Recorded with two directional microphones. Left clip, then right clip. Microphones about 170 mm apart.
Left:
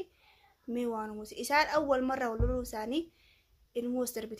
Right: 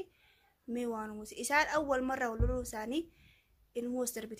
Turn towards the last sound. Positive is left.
turn(degrees=0)  # may be behind; listen again after turning